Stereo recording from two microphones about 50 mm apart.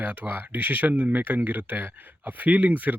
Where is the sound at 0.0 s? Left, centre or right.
Right.